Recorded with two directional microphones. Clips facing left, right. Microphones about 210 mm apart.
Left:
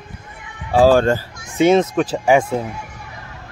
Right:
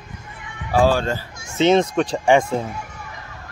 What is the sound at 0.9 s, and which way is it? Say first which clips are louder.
Speech: left 7 dB; 50° left (ahead or behind).